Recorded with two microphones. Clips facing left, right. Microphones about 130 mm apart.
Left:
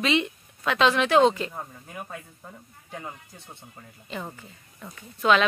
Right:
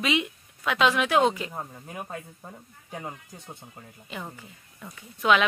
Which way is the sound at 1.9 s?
35° right (ahead or behind).